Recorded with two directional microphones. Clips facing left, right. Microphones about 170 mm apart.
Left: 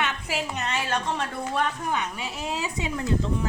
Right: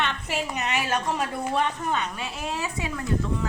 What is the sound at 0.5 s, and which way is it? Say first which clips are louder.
A woman's voice: right 3 dB; 10° right (ahead or behind).